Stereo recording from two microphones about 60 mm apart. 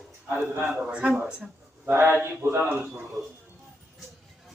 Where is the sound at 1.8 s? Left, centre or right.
Right.